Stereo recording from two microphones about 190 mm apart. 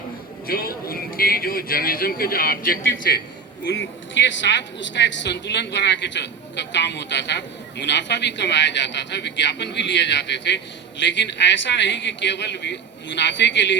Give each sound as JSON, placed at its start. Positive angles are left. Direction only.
{"t": 0.4, "sound": "speech", "side_deg": 50}
{"t": 3.7, "sound": "speech", "side_deg": 70}